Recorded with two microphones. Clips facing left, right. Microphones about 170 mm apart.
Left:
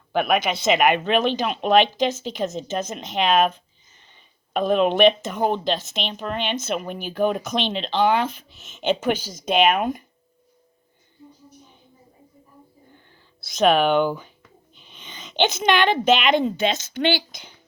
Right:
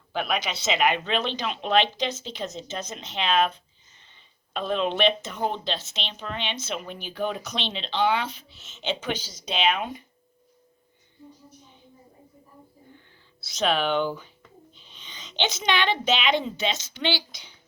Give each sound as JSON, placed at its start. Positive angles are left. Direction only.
{"t": 0.1, "sound": "speech", "side_deg": 55}
{"t": 4.5, "sound": "speech", "side_deg": 50}
{"t": 13.1, "sound": "a woman's voice", "side_deg": 50}